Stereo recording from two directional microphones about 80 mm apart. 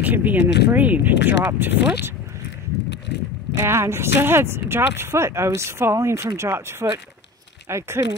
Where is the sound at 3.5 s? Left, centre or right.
Right.